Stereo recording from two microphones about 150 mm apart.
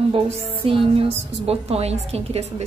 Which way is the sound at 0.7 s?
35° right (ahead or behind).